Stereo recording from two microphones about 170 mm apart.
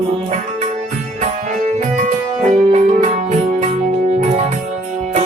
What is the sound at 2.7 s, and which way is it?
Music, 40° right (ahead or behind).